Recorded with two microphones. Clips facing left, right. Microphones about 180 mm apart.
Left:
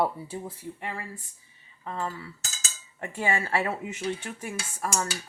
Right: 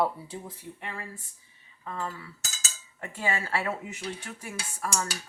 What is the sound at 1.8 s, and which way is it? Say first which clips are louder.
Cutlery: left 2 dB; 25° left (ahead or behind).